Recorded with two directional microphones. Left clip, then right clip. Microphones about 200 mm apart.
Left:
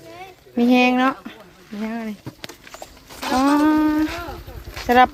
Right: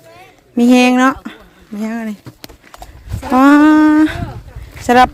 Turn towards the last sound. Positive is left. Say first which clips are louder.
# right 5 dB
turn(degrees=-30)  # may be behind; listen again after turning